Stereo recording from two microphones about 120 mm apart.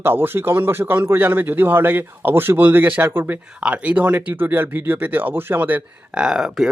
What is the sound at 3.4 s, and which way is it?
Speech, 10° right (ahead or behind).